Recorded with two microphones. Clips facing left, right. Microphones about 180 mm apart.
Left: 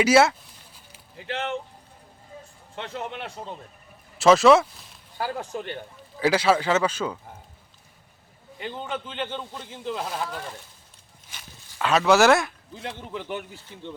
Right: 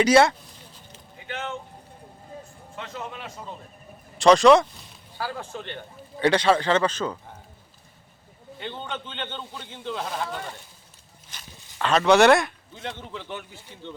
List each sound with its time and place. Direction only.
0.0 s a man's voice: 5° left (ahead or behind)
0.9 s a sound: centre (ahead or behind)
4.2 s speech: 5° left (ahead or behind)
5.1 s speech: 15° left (ahead or behind)
6.1 s speech: 5° left (ahead or behind)
8.5 s a man's voice: 5° left (ahead or behind)
13.1 s speech: 15° left (ahead or behind)